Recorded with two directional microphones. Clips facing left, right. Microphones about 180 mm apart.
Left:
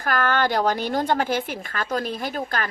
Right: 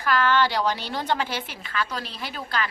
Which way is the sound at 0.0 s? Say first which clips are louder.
Even; 50° left (ahead or behind).